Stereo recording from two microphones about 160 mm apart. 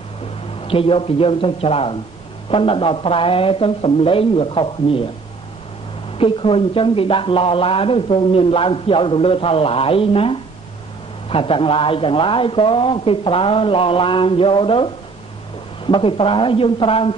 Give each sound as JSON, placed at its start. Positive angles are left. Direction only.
{"t": 0.7, "sound": "speech", "side_deg": 35}
{"t": 6.1, "sound": "speech", "side_deg": 35}